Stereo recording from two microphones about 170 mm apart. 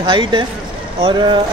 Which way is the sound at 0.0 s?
25° right (ahead or behind).